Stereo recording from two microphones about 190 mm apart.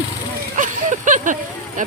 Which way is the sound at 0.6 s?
40° right (ahead or behind).